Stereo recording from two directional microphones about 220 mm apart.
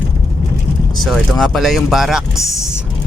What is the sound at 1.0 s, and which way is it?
Speech, centre (ahead or behind).